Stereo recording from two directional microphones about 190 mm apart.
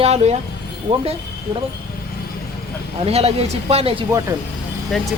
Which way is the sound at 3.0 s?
35° right (ahead or behind).